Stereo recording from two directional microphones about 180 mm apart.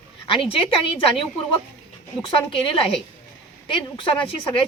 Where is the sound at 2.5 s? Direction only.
30° left (ahead or behind).